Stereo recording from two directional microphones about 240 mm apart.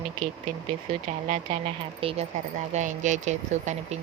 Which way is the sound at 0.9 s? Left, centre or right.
Right.